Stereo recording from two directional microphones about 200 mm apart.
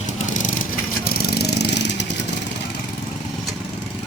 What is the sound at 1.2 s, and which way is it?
Vehicle, 55° left (ahead or behind).